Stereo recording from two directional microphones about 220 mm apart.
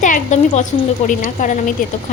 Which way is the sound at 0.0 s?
35° left (ahead or behind).